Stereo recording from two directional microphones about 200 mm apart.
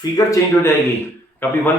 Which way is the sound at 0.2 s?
15° left (ahead or behind).